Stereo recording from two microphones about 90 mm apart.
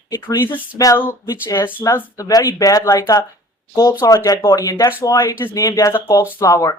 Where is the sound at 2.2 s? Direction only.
40° left (ahead or behind).